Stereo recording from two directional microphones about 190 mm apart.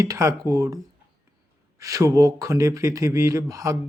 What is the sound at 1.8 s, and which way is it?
Speech, 15° right (ahead or behind).